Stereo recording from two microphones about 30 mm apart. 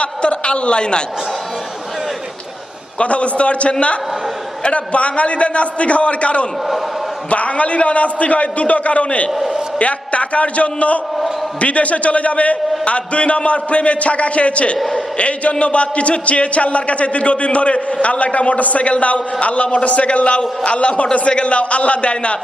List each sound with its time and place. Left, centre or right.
0.0 s a man's voice: left
3.0 s a man's voice: left